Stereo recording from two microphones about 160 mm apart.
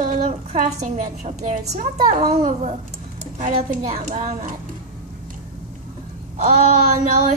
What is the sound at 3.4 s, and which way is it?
A woman's voice, 50° right (ahead or behind).